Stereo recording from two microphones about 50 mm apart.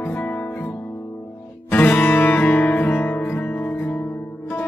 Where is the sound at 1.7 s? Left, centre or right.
Left.